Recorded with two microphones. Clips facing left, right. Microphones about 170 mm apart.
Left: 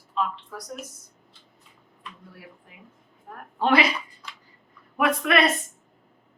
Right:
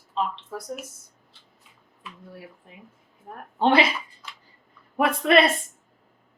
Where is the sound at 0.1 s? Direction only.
30° right (ahead or behind).